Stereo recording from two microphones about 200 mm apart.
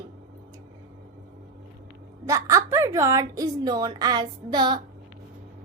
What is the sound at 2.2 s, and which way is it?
A woman's voice, 15° right (ahead or behind).